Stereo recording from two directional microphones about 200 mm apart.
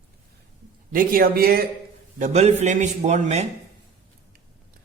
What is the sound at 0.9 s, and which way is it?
Speech, 45° right (ahead or behind).